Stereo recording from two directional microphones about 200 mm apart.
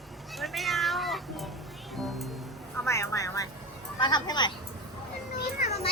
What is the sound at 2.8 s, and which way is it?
Speech, 15° left (ahead or behind).